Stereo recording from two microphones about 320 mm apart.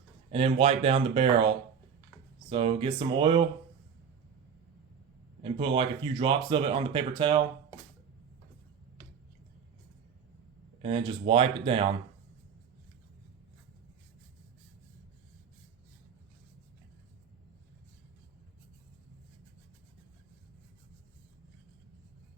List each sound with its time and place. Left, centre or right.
0.3 s speech: centre
2.5 s speech: centre
5.4 s speech: centre
10.8 s speech: centre